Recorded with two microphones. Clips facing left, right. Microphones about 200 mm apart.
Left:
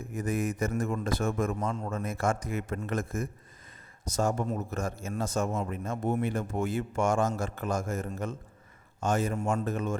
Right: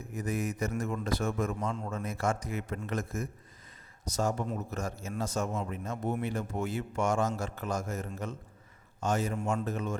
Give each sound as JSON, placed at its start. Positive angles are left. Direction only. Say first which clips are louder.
{"t": 0.2, "sound": "a man's voice", "louder": "left 3 dB", "side_deg": 50}